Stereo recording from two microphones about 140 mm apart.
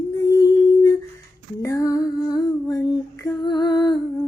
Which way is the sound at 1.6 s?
20° left (ahead or behind).